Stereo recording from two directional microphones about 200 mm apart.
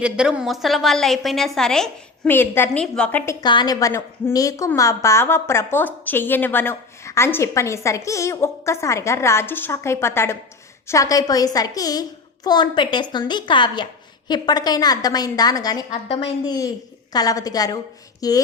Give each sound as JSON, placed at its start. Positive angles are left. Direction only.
{"t": 0.0, "sound": "a woman's voice", "side_deg": -5}
{"t": 3.4, "sound": "a woman's voice", "side_deg": 20}
{"t": 15.9, "sound": "a woman's voice", "side_deg": 30}